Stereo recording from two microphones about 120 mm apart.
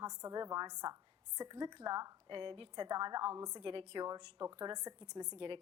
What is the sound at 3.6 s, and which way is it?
Speech, 45° right (ahead or behind).